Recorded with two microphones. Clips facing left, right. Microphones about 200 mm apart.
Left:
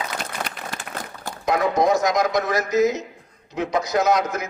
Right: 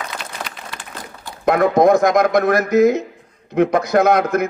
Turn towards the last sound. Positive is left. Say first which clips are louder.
# right 6 dB
turn(degrees=-55)  # may be behind; listen again after turning